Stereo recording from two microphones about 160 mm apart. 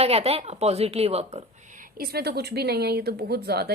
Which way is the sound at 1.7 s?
65° right (ahead or behind).